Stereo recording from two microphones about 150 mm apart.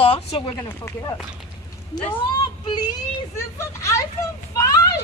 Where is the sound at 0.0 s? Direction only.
35° left (ahead or behind).